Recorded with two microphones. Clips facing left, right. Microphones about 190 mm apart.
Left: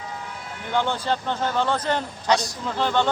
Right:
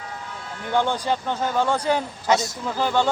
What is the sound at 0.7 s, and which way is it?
Speech, 15° right (ahead or behind).